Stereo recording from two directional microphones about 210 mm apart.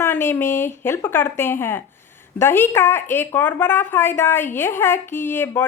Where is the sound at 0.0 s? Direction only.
10° left (ahead or behind).